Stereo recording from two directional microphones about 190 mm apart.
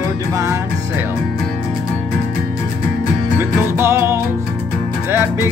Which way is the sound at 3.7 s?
15° right (ahead or behind).